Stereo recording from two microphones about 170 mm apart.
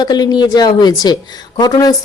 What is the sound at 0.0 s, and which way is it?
Speech, 25° left (ahead or behind).